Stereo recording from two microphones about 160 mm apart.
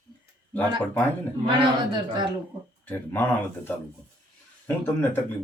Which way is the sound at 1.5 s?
30° right (ahead or behind).